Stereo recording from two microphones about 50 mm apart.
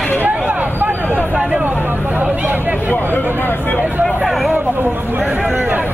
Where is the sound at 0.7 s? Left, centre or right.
Right.